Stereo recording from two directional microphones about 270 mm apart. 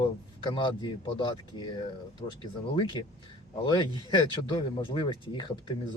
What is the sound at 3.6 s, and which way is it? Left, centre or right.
Speech, centre.